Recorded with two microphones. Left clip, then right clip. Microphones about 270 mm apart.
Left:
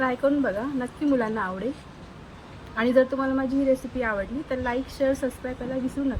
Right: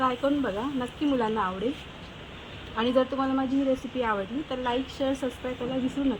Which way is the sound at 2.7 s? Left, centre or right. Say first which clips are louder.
Left 4 dB; centre.